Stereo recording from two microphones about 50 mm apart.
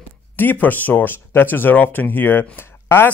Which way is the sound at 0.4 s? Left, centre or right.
Left.